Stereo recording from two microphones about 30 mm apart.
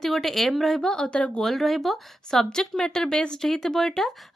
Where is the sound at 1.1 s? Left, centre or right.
Left.